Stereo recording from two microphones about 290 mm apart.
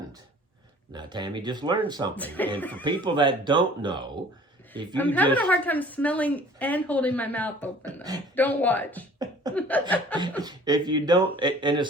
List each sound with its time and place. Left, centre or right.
0.9 s speech: centre
2.1 s a woman's voice: centre
2.8 s speech: centre
4.9 s a woman's voice: centre
9.1 s beatboxing: centre
9.6 s a woman's voice: centre
10.4 s speech: centre